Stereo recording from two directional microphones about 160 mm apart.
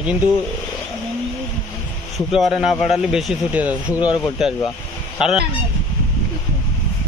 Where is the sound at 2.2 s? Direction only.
Centre (ahead or behind).